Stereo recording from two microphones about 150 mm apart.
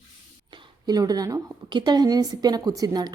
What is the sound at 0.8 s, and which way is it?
A woman's voice, 25° right (ahead or behind).